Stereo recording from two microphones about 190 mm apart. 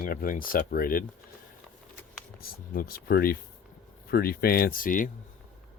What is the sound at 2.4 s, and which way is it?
Speech, 50° left (ahead or behind).